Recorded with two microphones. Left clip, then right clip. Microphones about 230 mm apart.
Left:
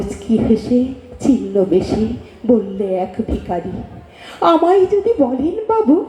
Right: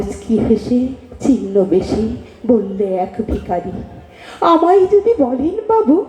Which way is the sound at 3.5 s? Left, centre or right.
Left.